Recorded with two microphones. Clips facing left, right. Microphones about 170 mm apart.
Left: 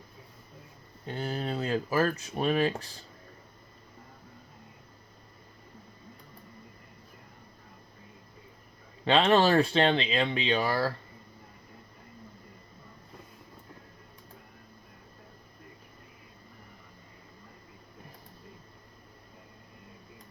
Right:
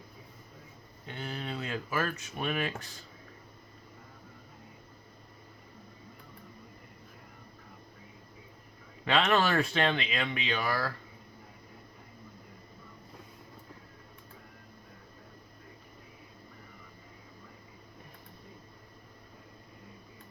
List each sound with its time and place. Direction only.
1.0 s speech: 35° left (ahead or behind)
9.0 s speech: 30° left (ahead or behind)